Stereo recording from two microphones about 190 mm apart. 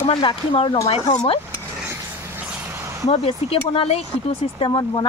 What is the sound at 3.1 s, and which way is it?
Speech, 30° left (ahead or behind).